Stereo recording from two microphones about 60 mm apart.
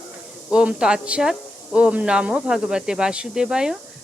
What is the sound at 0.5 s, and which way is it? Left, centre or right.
Speech, centre.